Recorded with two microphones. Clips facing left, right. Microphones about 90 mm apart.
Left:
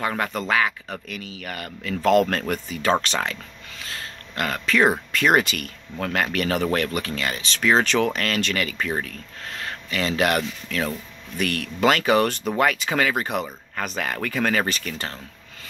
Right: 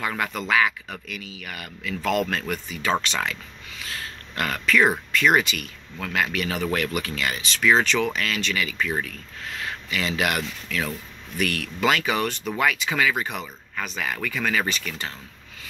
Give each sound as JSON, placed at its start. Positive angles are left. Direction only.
{"t": 0.0, "sound": "speech", "side_deg": 35}